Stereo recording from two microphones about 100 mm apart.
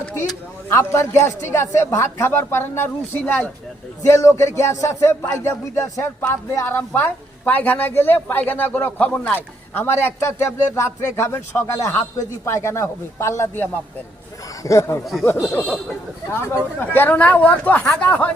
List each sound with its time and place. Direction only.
0.3 s a woman's voice: 25° left (ahead or behind)
15.0 s speech: centre (ahead or behind)
16.4 s speech: 25° left (ahead or behind)